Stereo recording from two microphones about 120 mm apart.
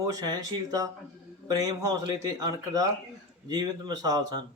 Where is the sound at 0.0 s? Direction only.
30° right (ahead or behind).